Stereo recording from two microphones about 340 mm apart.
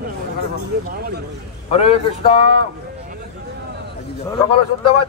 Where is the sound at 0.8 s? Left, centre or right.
Right.